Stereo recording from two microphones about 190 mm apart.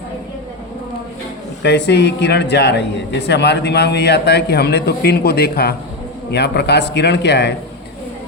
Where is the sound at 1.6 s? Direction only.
65° left (ahead or behind).